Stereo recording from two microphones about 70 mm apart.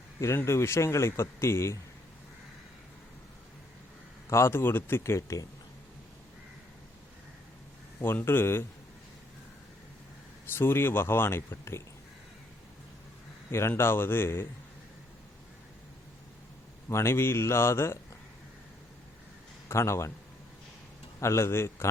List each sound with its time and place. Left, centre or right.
0.2 s a man's voice: left
4.3 s a man's voice: left
8.0 s a man's voice: left
10.5 s a man's voice: left
13.5 s a man's voice: left
16.9 s a man's voice: left
19.6 s a man's voice: left
21.2 s a man's voice: left